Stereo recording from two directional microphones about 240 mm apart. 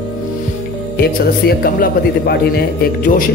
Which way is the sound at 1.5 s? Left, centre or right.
Left.